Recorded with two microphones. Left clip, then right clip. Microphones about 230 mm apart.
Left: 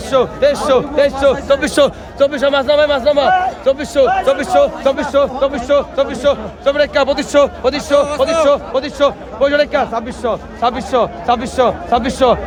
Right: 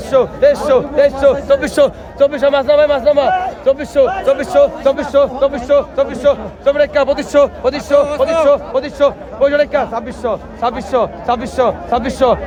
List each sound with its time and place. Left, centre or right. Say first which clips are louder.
0.1 s a man's voice: right 2 dB; left
4.9 s a man's voice: right 1 dB; left
5.4 s speech: right 1 dB; left